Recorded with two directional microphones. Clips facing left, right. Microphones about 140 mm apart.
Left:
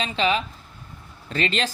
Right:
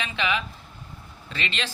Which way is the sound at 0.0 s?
35° left (ahead or behind).